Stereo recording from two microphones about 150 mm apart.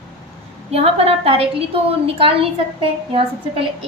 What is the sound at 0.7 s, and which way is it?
A woman's voice, 40° right (ahead or behind).